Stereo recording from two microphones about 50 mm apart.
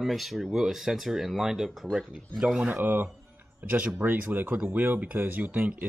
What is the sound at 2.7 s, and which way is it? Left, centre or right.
Speech, right.